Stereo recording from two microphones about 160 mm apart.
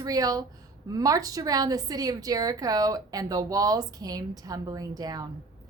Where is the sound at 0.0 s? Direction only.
20° right (ahead or behind).